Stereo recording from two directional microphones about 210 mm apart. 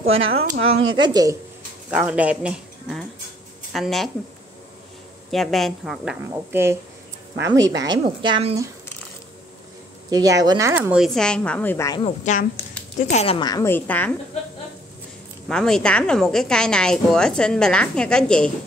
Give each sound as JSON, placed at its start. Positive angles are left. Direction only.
{"t": 0.0, "sound": "speech", "side_deg": -70}
{"t": 0.3, "sound": "speech", "side_deg": -30}
{"t": 1.9, "sound": "a woman's voice", "side_deg": -5}
{"t": 5.3, "sound": "a woman's voice", "side_deg": 0}
{"t": 6.3, "sound": "speech", "side_deg": -10}
{"t": 10.0, "sound": "a woman's voice", "side_deg": -15}
{"t": 12.0, "sound": "a woman's voice", "side_deg": 35}
{"t": 15.4, "sound": "a woman's voice", "side_deg": 0}